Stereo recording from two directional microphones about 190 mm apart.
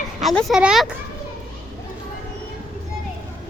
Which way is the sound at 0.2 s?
Centre (ahead or behind).